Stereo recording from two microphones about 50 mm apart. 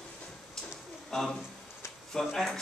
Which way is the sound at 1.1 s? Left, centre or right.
Centre.